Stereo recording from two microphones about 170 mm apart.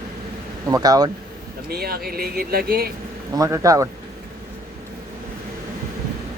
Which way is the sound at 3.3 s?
20° right (ahead or behind).